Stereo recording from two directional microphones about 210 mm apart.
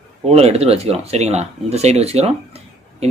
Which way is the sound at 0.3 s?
30° right (ahead or behind).